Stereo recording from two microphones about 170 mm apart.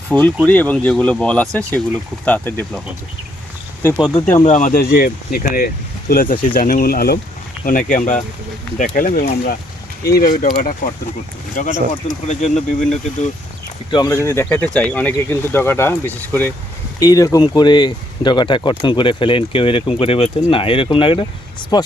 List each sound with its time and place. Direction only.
0.1 s speech: 10° left (ahead or behind)
3.8 s speech: 25° left (ahead or behind)
4.1 s speech: 10° left (ahead or behind)
4.4 s speech: 50° left (ahead or behind)
7.6 s speech: 50° left (ahead or behind)
13.9 s speech: 20° left (ahead or behind)